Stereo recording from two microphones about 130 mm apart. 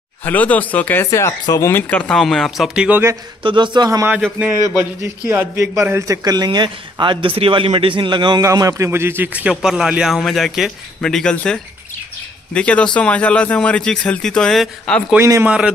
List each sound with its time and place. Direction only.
0.2 s speech: 15° left (ahead or behind)
1.7 s a man's voice: 15° left (ahead or behind); by 3.0 s 5° right (ahead or behind)
3.4 s a man's voice: 35° right (ahead or behind)
5.3 s a man's voice: 20° right (ahead or behind); by 8.5 s 35° right (ahead or behind)
8.5 s a man's voice: 25° right (ahead or behind); by 15.0 s 5° left (ahead or behind)
15.1 s a man's voice: 20° right (ahead or behind)